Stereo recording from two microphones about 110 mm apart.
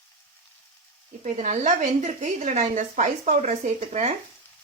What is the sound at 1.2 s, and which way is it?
Speech, 90° right.